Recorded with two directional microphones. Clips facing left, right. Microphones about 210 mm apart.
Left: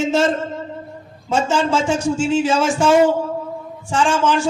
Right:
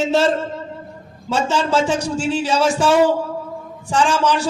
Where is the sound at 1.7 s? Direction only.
35° right (ahead or behind).